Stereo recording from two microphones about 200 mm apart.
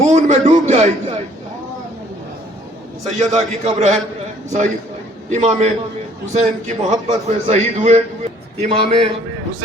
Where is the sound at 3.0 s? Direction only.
35° right (ahead or behind).